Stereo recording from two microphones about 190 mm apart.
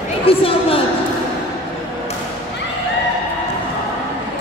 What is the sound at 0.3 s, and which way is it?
Speech, 30° left (ahead or behind).